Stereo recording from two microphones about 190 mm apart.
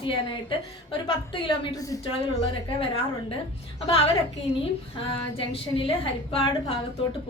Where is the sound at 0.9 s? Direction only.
25° left (ahead or behind).